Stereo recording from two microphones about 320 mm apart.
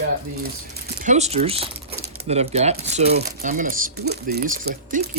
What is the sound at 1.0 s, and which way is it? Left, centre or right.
Speech, right.